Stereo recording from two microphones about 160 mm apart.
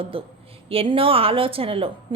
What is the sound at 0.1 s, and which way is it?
A woman's voice, 35° right (ahead or behind).